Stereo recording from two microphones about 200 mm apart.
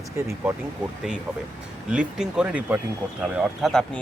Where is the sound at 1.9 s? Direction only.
5° right (ahead or behind).